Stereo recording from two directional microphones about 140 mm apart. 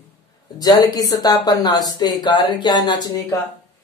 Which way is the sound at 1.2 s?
25° left (ahead or behind).